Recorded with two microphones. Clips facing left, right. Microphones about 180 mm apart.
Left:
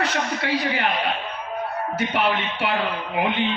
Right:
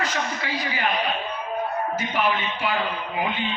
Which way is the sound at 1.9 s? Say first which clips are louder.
Left 4 dB; 65° left (ahead or behind).